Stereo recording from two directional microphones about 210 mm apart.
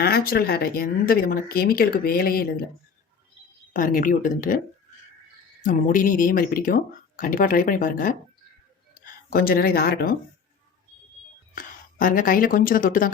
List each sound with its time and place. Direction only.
0.0 s speech: 45° left (ahead or behind)
3.7 s speech: 40° left (ahead or behind)
5.6 s speech: 40° left (ahead or behind)
9.3 s speech: 45° left (ahead or behind)
11.5 s speech: 40° left (ahead or behind)